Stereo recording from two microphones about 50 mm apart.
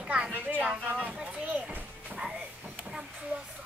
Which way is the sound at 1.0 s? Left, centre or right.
Right.